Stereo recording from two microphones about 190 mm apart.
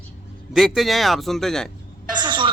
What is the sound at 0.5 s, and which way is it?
Speech, centre (ahead or behind).